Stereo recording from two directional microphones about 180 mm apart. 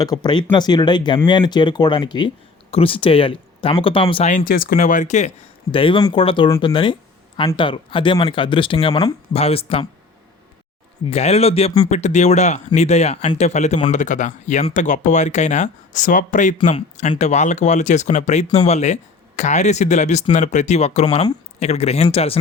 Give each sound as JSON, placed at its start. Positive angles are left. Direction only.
{"t": 0.0, "sound": "speech", "side_deg": 20}
{"t": 5.7, "sound": "speech", "side_deg": 30}
{"t": 11.0, "sound": "speech", "side_deg": 35}